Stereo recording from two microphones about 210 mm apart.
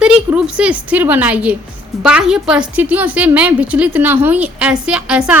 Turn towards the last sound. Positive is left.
turn(degrees=-5)  # may be behind; listen again after turning